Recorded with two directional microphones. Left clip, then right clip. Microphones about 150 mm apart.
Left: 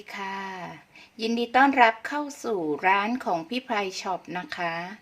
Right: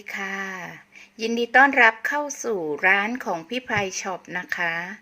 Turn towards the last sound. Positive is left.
turn(degrees=-10)  # may be behind; listen again after turning